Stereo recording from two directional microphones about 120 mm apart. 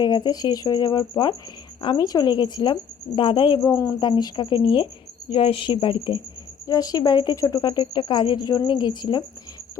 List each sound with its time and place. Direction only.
0.0 s a woman's voice: 35° left (ahead or behind)
3.6 s speech: 25° left (ahead or behind)
4.0 s a woman's voice: 40° left (ahead or behind)
6.7 s speech: 30° left (ahead or behind)